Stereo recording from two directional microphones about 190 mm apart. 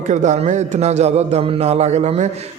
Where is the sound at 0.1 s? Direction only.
40° right (ahead or behind).